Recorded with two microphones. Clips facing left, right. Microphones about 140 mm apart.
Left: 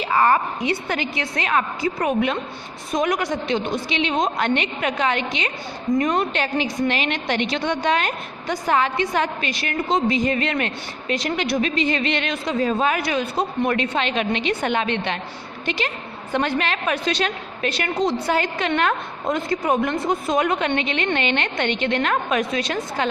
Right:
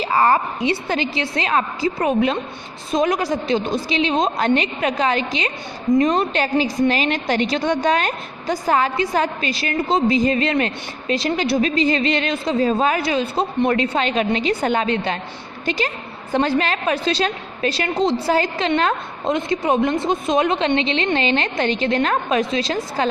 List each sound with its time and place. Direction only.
0.0 s a woman's voice: 35° right (ahead or behind)